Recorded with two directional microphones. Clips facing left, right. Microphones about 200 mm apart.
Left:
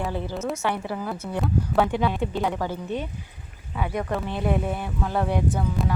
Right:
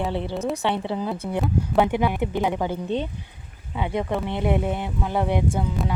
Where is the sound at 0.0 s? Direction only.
20° right (ahead or behind).